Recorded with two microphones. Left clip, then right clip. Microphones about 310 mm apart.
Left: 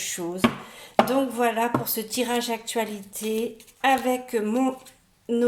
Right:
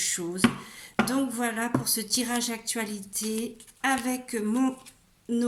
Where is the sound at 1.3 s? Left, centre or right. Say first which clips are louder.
Left 6 dB; centre.